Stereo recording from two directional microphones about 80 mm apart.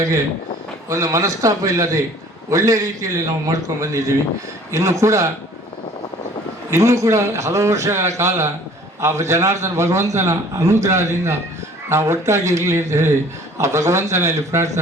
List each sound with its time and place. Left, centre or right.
0.9 s a man's voice: right
6.7 s a man's voice: right